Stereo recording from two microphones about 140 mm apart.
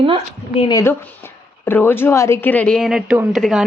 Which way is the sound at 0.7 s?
25° left (ahead or behind).